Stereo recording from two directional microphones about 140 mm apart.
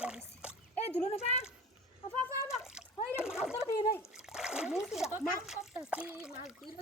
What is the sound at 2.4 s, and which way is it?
Water, 5° right (ahead or behind).